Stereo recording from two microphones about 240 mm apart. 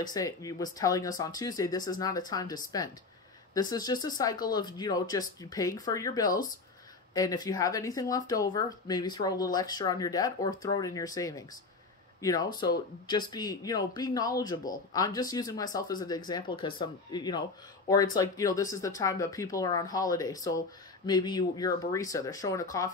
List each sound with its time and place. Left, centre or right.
0.0 s speech: centre